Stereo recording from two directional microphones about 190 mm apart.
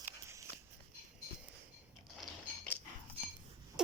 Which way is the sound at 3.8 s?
5° right (ahead or behind).